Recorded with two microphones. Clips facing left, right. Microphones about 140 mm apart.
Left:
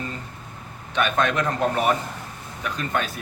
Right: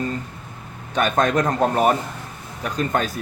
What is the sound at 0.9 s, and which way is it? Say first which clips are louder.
Speech: right 3 dB; 40° right (ahead or behind).